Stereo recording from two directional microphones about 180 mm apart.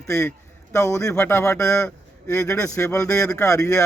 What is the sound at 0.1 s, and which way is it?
A man's voice, 15° left (ahead or behind).